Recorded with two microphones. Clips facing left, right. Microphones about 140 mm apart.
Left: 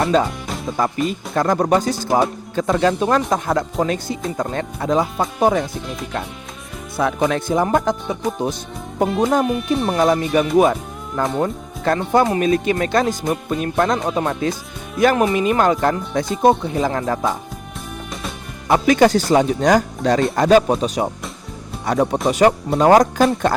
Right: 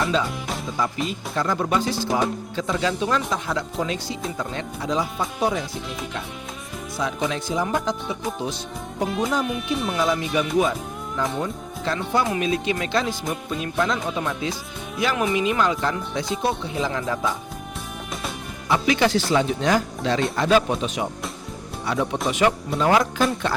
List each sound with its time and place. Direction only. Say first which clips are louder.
0.0 s speech: left 6 dB; 50° left (ahead or behind)
0.3 s music: left 2 dB; centre (ahead or behind)
1.0 s speech: left 6 dB; 50° left (ahead or behind)
6.9 s speech: left 7 dB; 60° left (ahead or behind)
9.0 s speech: left 6 dB; centre (ahead or behind)
9.6 s speech: left 5 dB; 45° left (ahead or behind)
18.7 s speech: left 6 dB; 45° left (ahead or behind)